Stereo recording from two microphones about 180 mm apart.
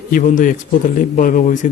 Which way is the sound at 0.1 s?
45° left (ahead or behind).